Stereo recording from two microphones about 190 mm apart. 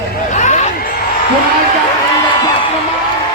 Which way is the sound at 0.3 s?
40° left (ahead or behind).